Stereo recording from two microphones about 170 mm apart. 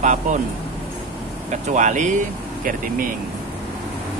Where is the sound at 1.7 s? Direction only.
45° right (ahead or behind).